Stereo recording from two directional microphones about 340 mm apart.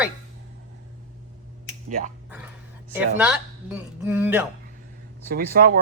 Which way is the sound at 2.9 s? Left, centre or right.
Centre.